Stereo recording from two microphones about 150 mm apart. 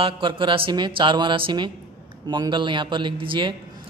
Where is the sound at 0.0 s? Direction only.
35° right (ahead or behind).